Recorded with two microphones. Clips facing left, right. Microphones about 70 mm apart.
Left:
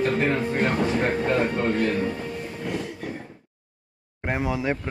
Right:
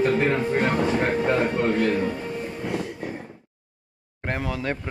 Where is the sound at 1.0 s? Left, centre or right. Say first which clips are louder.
Right 1 dB; centre.